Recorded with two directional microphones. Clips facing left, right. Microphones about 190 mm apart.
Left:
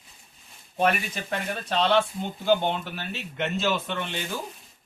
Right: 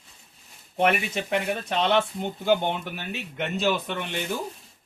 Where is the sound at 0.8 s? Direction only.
25° right (ahead or behind).